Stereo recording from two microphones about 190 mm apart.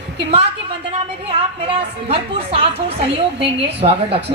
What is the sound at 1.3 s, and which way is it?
A woman's voice, 30° right (ahead or behind).